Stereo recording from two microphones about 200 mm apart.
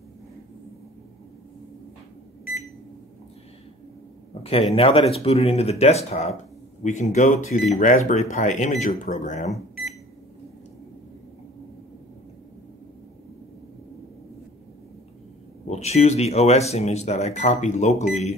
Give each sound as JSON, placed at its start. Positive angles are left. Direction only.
{"t": 4.3, "sound": "speech", "side_deg": 30}
{"t": 9.5, "sound": "microwave oven", "side_deg": 0}
{"t": 15.7, "sound": "speech", "side_deg": 30}